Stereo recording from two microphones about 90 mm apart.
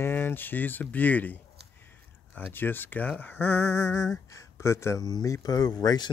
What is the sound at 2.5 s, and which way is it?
Speech, 20° left (ahead or behind).